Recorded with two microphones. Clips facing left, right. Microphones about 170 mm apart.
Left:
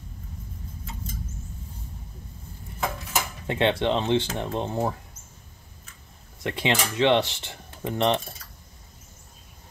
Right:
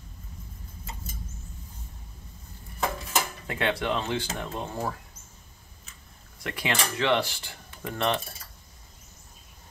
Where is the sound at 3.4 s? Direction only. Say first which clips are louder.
Left 9 dB; 25° left (ahead or behind).